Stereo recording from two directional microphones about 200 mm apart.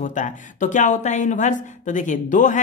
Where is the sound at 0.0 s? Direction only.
40° left (ahead or behind).